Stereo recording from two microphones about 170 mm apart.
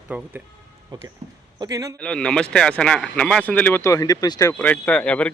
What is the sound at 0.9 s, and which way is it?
Speech, 20° right (ahead or behind).